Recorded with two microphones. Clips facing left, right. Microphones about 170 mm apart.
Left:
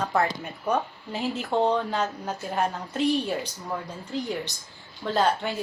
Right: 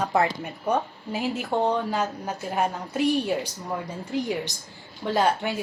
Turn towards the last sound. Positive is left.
turn(degrees=-10)  # may be behind; listen again after turning